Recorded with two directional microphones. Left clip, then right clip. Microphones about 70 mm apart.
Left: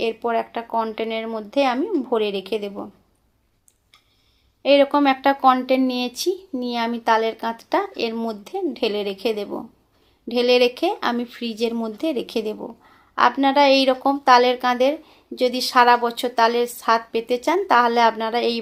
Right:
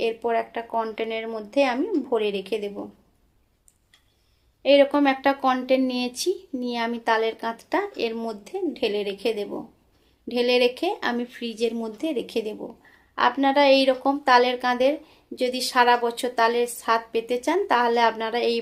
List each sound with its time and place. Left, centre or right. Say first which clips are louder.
0.0 s a woman's voice: left 2 dB; left
4.6 s a woman's voice: left 2 dB; left